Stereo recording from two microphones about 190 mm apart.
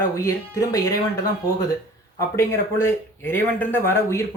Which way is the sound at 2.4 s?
10° left (ahead or behind).